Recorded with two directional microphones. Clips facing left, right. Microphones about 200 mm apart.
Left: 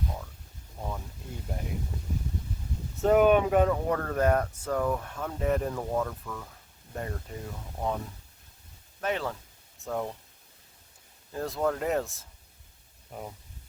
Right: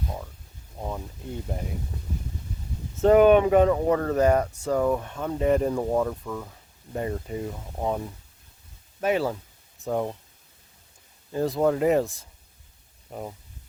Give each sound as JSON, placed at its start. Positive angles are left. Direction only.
{"t": 3.0, "sound": "speech", "side_deg": 0}
{"t": 7.8, "sound": "speech", "side_deg": -20}
{"t": 9.0, "sound": "speech", "side_deg": -10}
{"t": 11.3, "sound": "speech", "side_deg": -5}